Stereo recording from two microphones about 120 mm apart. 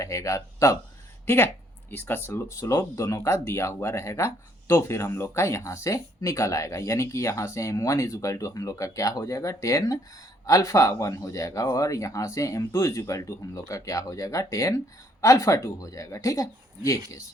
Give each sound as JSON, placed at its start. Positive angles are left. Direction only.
{"t": 0.0, "sound": "speech", "side_deg": 25}
{"t": 1.9, "sound": "speech", "side_deg": 15}